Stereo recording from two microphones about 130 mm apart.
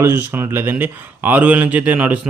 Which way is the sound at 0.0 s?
20° right (ahead or behind).